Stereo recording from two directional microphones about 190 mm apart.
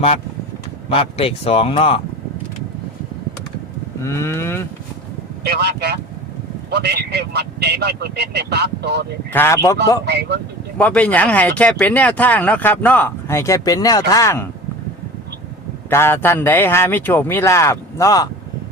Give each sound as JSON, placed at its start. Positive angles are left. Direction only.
{"t": 0.9, "sound": "speech", "side_deg": 30}
{"t": 4.0, "sound": "speech", "side_deg": 15}
{"t": 5.4, "sound": "speech", "side_deg": -55}
{"t": 9.3, "sound": "speech", "side_deg": 15}
{"t": 10.1, "sound": "speech", "side_deg": -60}
{"t": 10.8, "sound": "speech", "side_deg": 10}
{"t": 15.9, "sound": "speech", "side_deg": 10}